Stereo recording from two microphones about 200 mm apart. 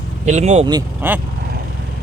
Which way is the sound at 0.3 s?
35° right (ahead or behind).